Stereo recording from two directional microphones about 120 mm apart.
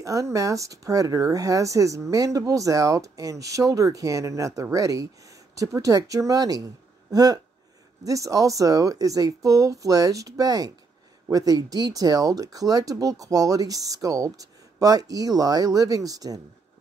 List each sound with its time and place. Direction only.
0.0 s speech: 25° right (ahead or behind)